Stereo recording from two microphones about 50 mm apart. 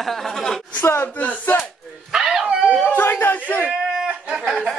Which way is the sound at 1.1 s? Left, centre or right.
Left.